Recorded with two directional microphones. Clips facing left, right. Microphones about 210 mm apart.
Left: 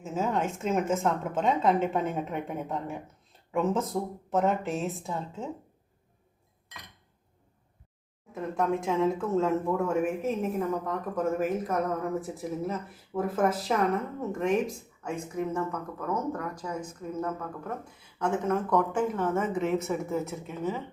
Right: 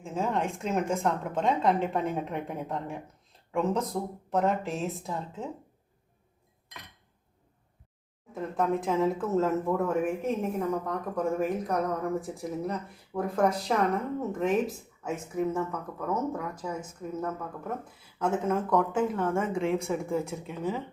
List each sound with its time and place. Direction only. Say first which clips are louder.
0.0 s speech: left 1 dB; centre (ahead or behind)
8.3 s speech: even; centre (ahead or behind)
19.7 s speech: even; 5° left (ahead or behind)
20.1 s speech: right 1 dB; 10° right (ahead or behind)